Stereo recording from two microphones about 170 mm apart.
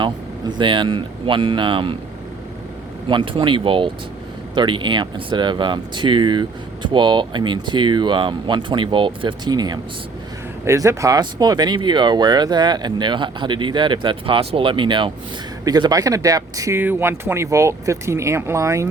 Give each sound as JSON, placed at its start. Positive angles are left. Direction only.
{"t": 0.0, "sound": "speech", "side_deg": -30}
{"t": 3.1, "sound": "speech", "side_deg": -30}